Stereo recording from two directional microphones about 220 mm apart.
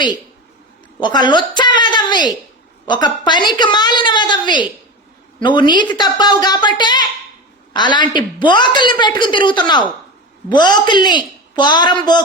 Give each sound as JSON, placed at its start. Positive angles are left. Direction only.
{"t": 1.0, "sound": "a woman's voice", "side_deg": 20}